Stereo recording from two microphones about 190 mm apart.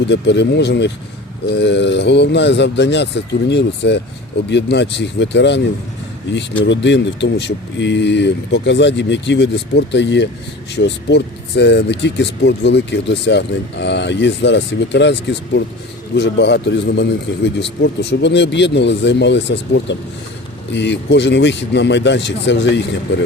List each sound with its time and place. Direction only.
0.1 s speech: 65° left (ahead or behind)
6.7 s speech: 70° left (ahead or behind)